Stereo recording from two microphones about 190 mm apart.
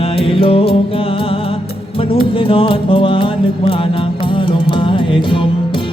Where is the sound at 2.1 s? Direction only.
30° left (ahead or behind).